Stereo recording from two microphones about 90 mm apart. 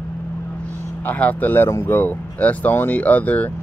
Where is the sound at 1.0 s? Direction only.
15° left (ahead or behind).